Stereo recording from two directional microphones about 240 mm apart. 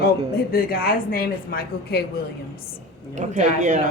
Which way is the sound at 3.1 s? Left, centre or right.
Right.